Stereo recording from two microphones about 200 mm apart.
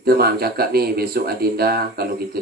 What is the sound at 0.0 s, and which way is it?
Speech, 50° right (ahead or behind).